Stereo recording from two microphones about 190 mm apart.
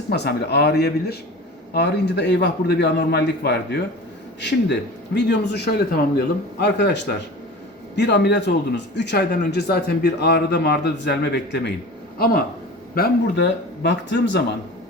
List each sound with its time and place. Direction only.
0.1 s a man's voice: 60° left (ahead or behind)